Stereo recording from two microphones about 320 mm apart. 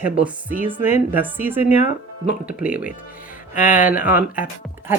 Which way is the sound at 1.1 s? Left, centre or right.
Centre.